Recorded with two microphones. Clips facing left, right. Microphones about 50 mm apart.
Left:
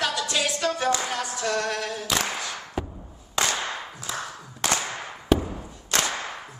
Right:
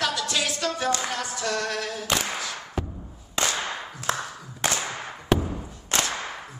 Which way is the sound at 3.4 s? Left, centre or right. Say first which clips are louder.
Left 1 dB; centre.